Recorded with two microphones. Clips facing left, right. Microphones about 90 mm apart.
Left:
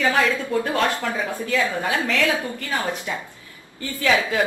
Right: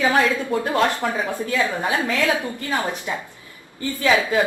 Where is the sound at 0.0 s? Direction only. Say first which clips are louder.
Right 2 dB; 20° right (ahead or behind).